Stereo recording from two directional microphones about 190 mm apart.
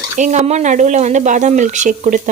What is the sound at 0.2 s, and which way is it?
Speech, 35° right (ahead or behind).